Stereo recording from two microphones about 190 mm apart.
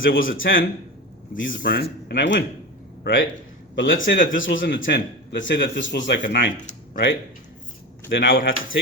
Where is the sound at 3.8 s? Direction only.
45° left (ahead or behind).